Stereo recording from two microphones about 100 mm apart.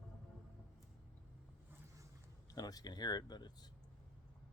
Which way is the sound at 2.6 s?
40° left (ahead or behind).